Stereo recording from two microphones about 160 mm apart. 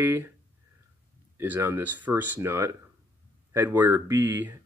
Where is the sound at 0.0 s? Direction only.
15° right (ahead or behind).